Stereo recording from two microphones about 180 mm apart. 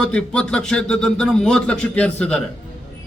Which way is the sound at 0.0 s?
5° left (ahead or behind).